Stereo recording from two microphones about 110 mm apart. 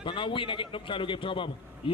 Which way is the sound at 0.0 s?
50° left (ahead or behind).